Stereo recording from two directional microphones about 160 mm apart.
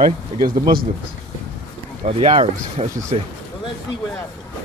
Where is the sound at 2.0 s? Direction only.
40° right (ahead or behind).